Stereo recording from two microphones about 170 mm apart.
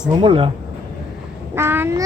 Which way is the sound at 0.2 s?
30° right (ahead or behind).